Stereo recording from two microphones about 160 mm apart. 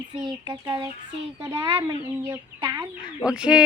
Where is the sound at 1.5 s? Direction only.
30° right (ahead or behind).